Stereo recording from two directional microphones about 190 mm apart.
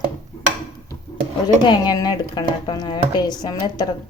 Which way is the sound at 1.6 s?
20° left (ahead or behind).